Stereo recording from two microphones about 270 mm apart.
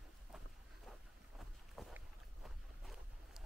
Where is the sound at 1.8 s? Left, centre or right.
Centre.